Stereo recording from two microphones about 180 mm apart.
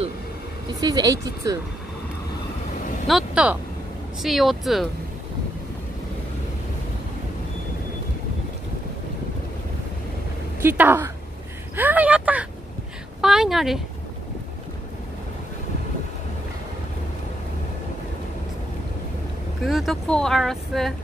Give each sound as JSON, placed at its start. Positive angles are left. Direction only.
{"t": 0.7, "sound": "speech", "side_deg": -20}
{"t": 3.1, "sound": "speech", "side_deg": -5}
{"t": 10.6, "sound": "speech", "side_deg": -10}
{"t": 19.6, "sound": "speech", "side_deg": 0}